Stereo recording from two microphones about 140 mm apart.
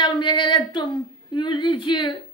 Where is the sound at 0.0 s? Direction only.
35° left (ahead or behind).